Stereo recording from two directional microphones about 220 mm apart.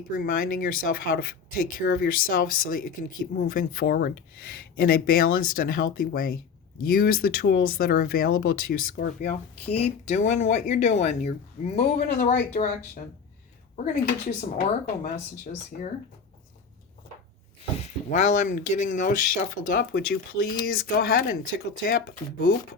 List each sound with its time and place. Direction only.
0.2 s speech: 40° left (ahead or behind)
11.9 s speech: 45° left (ahead or behind)
13.7 s speech: 35° left (ahead or behind)
17.7 s speech: 30° left (ahead or behind)